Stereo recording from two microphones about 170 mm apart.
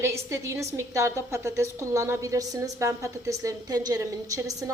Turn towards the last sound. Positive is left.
turn(degrees=-20)  # may be behind; listen again after turning